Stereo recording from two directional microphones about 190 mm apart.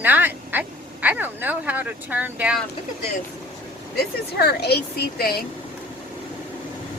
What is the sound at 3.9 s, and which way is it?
Speech, 55° left (ahead or behind).